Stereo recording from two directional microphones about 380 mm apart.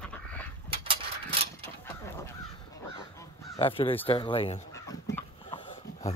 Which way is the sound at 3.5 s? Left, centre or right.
Centre.